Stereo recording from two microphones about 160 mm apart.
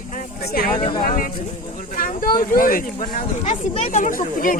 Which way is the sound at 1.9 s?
65° left (ahead or behind).